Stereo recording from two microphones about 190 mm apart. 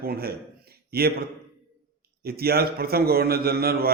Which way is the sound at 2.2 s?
55° right (ahead or behind).